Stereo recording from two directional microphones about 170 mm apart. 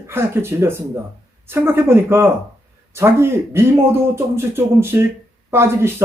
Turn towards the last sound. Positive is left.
turn(degrees=-15)  # may be behind; listen again after turning